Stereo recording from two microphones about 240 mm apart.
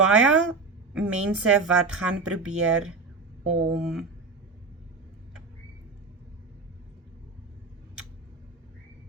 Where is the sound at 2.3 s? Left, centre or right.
Right.